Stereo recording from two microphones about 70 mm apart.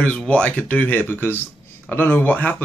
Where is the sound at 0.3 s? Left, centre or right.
Centre.